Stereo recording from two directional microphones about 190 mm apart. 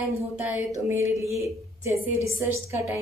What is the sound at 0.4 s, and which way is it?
A woman's voice, 10° right (ahead or behind).